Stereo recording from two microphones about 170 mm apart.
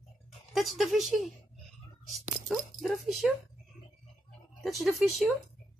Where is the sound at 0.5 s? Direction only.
Centre (ahead or behind).